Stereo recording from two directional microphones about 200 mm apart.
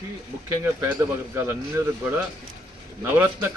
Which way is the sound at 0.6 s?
15° right (ahead or behind).